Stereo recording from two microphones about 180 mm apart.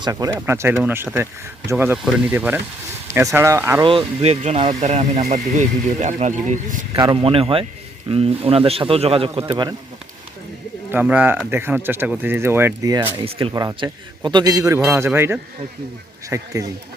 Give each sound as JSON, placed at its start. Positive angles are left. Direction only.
{"t": 0.0, "sound": "speech", "side_deg": -20}
{"t": 3.8, "sound": "speech", "side_deg": -30}
{"t": 6.9, "sound": "a man's voice", "side_deg": -25}
{"t": 10.9, "sound": "a man's voice", "side_deg": -5}